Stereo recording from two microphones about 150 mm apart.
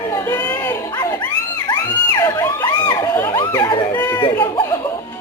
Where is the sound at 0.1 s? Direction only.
20° left (ahead or behind).